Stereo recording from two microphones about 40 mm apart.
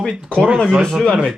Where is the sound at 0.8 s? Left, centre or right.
Centre.